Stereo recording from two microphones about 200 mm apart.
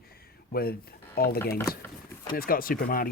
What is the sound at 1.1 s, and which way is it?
Speech, 50° left (ahead or behind).